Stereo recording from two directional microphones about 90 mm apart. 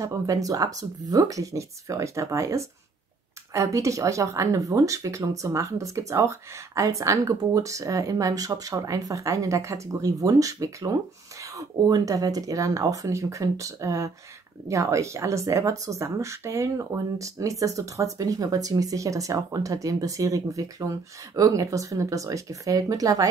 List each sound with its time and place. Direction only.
0.0 s speech: 40° right (ahead or behind)